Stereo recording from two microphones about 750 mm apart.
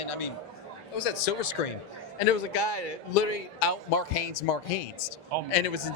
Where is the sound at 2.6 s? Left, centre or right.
Left.